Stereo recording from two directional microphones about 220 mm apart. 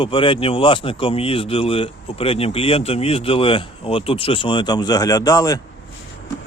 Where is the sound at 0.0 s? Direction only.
25° left (ahead or behind).